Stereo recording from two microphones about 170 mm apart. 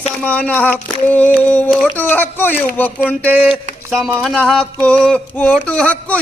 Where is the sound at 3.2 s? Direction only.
10° right (ahead or behind).